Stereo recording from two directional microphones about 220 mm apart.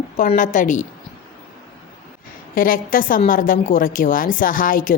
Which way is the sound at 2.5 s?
40° left (ahead or behind).